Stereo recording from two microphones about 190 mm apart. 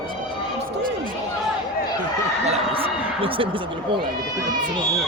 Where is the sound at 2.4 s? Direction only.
30° right (ahead or behind).